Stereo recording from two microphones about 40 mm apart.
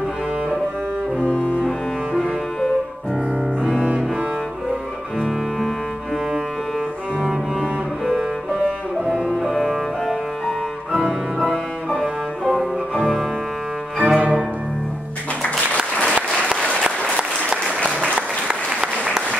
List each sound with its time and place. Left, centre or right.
7.2 s cello: centre
8.6 s music: centre
10.9 s cello: centre
13.9 s music: right
17.2 s applause: right